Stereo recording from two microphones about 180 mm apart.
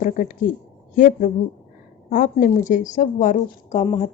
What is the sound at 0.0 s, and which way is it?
A woman's voice, 50° left (ahead or behind).